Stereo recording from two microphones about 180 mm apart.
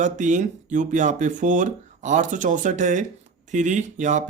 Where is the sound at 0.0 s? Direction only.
45° right (ahead or behind).